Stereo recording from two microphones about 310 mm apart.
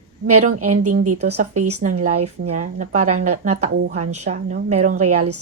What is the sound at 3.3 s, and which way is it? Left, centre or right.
Speech, centre.